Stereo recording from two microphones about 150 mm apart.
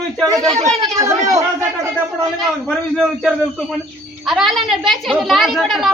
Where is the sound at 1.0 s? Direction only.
20° right (ahead or behind).